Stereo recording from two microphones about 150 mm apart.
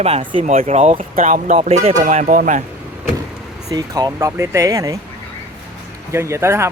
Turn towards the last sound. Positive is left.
turn(degrees=-15)  # may be behind; listen again after turning